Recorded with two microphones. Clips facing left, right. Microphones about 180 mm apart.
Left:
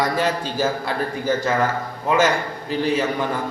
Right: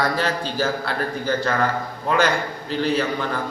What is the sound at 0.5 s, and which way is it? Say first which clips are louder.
Speech: left 1 dB; 20° left (ahead or behind).